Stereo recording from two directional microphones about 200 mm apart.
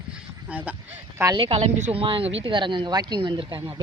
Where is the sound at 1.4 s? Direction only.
30° right (ahead or behind).